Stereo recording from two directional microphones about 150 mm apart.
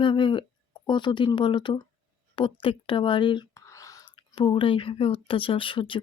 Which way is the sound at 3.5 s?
20° left (ahead or behind).